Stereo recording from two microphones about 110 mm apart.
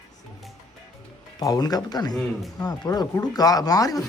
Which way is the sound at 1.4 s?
35° left (ahead or behind).